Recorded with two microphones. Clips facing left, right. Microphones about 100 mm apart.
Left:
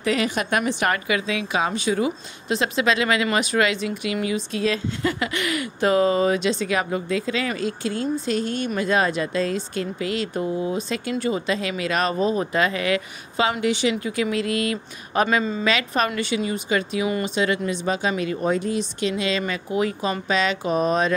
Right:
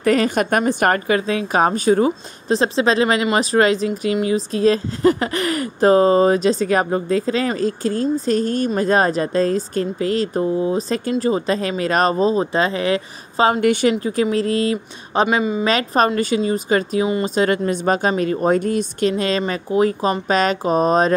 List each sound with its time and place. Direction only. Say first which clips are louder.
0.0 s a woman's voice: right 6 dB; 45° right (ahead or behind)
13.6 s speech: right 6 dB; 50° right (ahead or behind)
14.0 s a woman's voice: right 5 dB; 35° right (ahead or behind)
15.2 s a woman's voice: right 4 dB; 15° right (ahead or behind)
15.6 s a woman's voice: right 5 dB; 35° right (ahead or behind)